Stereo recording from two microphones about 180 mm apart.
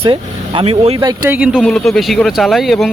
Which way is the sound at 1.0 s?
20° right (ahead or behind).